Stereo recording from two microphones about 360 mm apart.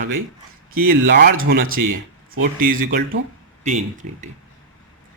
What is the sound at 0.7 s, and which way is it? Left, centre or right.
A man's voice, right.